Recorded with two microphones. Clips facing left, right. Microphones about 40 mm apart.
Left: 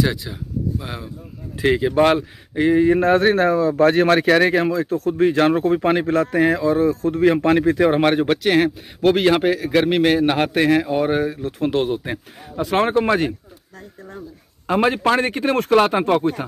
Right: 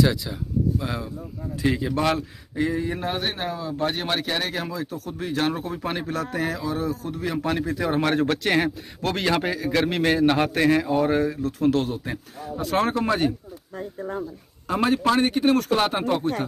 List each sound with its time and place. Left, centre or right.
0.0 s speech: centre
1.5 s speech: left
3.1 s a man's voice: left
4.5 s speech: left
6.3 s speech: left
7.7 s speech: left
8.2 s a man's voice: centre; by 11.9 s left
11.9 s a man's voice: left
13.7 s speech: right
14.7 s speech: left